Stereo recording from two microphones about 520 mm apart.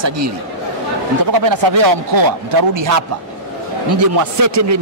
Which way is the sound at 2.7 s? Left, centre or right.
Right.